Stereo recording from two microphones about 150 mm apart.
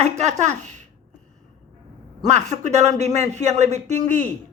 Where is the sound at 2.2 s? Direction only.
50° right (ahead or behind).